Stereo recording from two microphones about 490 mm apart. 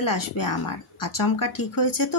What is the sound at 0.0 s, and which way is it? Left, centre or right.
Speech, left.